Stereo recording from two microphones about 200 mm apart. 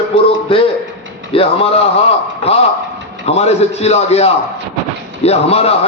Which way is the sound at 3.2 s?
30° left (ahead or behind).